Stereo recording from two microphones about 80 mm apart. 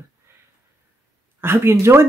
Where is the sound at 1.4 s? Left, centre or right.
Right.